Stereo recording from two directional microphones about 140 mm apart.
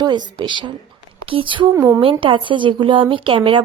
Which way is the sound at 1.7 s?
20° right (ahead or behind).